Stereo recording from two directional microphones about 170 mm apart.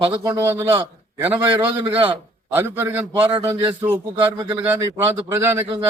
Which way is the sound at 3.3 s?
30° right (ahead or behind).